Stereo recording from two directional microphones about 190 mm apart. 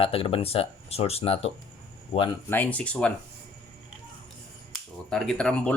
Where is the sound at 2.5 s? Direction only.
10° left (ahead or behind).